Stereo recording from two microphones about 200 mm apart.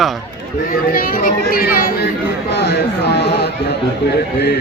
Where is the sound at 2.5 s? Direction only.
55° left (ahead or behind).